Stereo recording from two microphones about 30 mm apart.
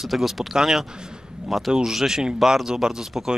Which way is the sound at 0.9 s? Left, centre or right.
Right.